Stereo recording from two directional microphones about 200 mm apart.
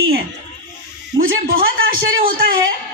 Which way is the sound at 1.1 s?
45° right (ahead or behind).